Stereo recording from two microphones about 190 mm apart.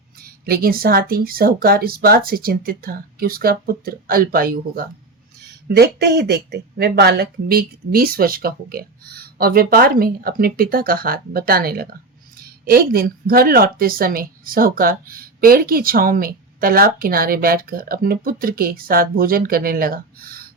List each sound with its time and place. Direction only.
0.2 s speech: 55° right (ahead or behind)